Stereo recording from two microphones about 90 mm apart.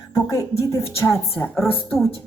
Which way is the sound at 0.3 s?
40° left (ahead or behind).